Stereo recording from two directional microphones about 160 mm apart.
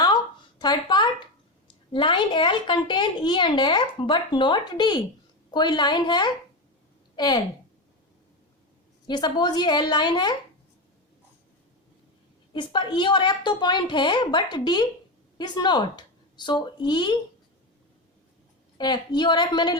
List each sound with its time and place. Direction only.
0.6 s a sound: 25° left (ahead or behind)
1.6 s a child's voice: 30° left (ahead or behind)
9.0 s a child's voice: 30° left (ahead or behind)
12.5 s a child's voice: 30° left (ahead or behind)
18.8 s a child's voice: 25° left (ahead or behind)